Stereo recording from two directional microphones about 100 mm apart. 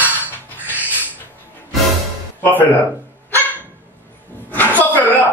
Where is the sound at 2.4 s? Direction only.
15° left (ahead or behind).